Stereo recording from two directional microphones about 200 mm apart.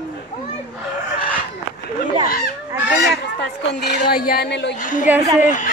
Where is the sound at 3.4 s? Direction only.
55° left (ahead or behind).